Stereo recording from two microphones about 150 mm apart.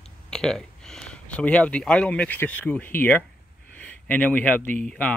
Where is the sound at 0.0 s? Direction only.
5° left (ahead or behind).